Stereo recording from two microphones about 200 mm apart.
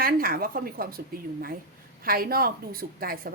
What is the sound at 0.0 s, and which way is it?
A woman's voice, 45° right (ahead or behind).